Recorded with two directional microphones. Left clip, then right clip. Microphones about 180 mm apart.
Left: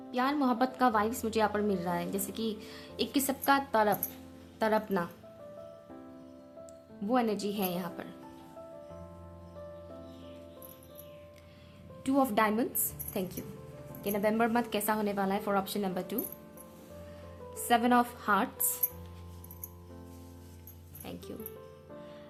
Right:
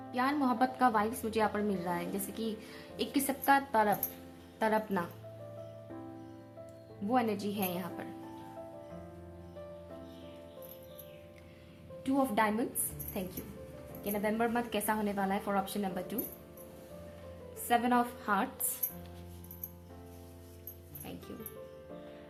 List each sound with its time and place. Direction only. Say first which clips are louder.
0.1 s a woman's voice: left 2 dB; 35° left (ahead or behind)
7.1 s a woman's voice: left 2 dB; 35° left (ahead or behind)
12.0 s a woman's voice: left 3 dB; 45° left (ahead or behind)
14.0 s a woman's voice: left 4 dB; 50° left (ahead or behind)
17.7 s a woman's voice: left 3 dB; 45° left (ahead or behind)